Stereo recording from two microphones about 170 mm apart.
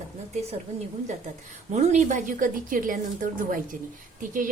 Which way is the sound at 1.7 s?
45° right (ahead or behind).